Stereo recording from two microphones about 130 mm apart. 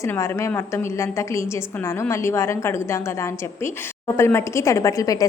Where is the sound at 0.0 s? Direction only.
20° left (ahead or behind).